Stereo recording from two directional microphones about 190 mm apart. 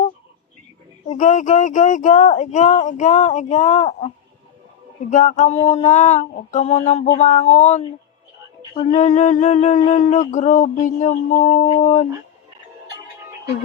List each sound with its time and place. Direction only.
1.0 s speech: 40° left (ahead or behind)
5.1 s speech: 40° left (ahead or behind)